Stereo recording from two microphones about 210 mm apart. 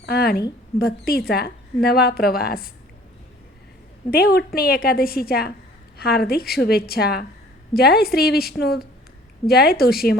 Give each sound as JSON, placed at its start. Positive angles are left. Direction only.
{"t": 0.0, "sound": "mouse", "side_deg": 50}
{"t": 0.8, "sound": "a woman's voice", "side_deg": 45}
{"t": 4.1, "sound": "a woman's voice", "side_deg": 45}